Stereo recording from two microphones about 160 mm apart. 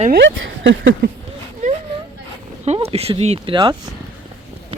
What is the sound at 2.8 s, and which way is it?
Speech, 40° right (ahead or behind).